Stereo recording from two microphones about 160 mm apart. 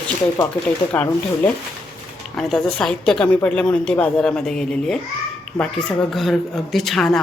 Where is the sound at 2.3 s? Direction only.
5° left (ahead or behind).